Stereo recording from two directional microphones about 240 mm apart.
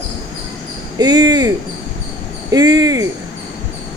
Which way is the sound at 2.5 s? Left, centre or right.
Centre.